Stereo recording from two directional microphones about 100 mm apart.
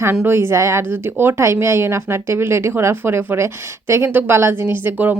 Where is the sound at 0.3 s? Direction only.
25° right (ahead or behind).